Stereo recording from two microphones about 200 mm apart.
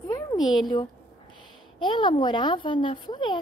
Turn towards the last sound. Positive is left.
turn(degrees=25)  # may be behind; listen again after turning